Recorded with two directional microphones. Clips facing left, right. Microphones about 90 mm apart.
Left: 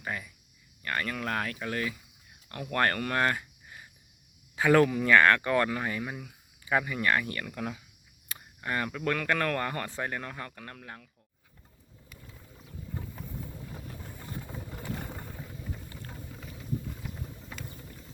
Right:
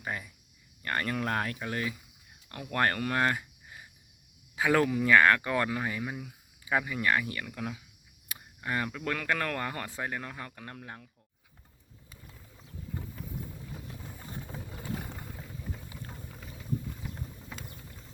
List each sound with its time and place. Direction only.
0.0 s speech: 25° right (ahead or behind)
14.4 s a sound: 10° left (ahead or behind)
15.9 s boiling: 10° right (ahead or behind)